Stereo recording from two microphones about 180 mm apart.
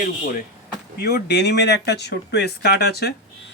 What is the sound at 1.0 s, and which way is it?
Speech, 60° left (ahead or behind).